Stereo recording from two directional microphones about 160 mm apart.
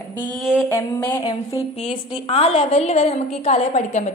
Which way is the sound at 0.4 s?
5° right (ahead or behind).